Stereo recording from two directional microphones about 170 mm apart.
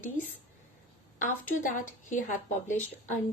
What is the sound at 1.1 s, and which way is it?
Speech, 50° left (ahead or behind).